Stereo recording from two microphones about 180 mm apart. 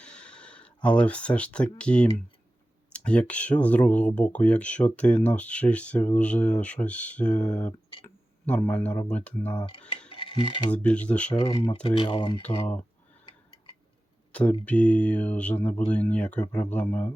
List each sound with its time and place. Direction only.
0.0 s a sound: 5° left (ahead or behind)
1.8 s speech: 5° left (ahead or behind)
8.0 s a sound: 10° left (ahead or behind)
9.0 s speech: 5° left (ahead or behind)
9.6 s speech: 25° left (ahead or behind)
10.1 s mechanisms: 30° left (ahead or behind)
10.7 s speech: 5° left (ahead or behind)
11.3 s speech: 25° left (ahead or behind)
14.6 s speech: 5° left (ahead or behind)